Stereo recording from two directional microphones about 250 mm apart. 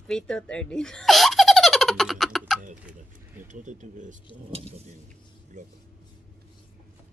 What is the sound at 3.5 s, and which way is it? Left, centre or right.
Speech, right.